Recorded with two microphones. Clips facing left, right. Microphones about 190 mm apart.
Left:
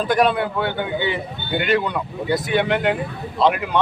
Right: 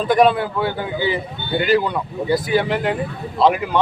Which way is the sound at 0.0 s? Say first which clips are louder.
Right 3 dB; centre (ahead or behind).